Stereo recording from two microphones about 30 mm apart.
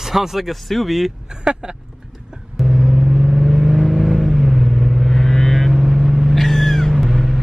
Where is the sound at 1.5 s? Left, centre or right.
Right.